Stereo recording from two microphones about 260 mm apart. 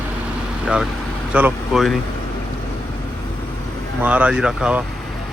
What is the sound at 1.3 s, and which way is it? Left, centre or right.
Speech, centre.